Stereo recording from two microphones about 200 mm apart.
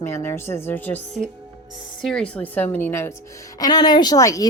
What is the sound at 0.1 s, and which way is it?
Speech, 10° left (ahead or behind).